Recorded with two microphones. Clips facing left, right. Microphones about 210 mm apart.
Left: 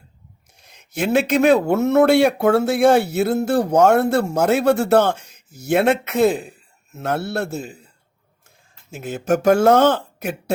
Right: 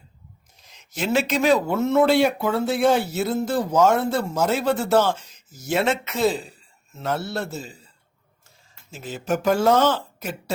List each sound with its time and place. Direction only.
0.6 s speech: 60° left (ahead or behind)
8.9 s speech: 55° left (ahead or behind)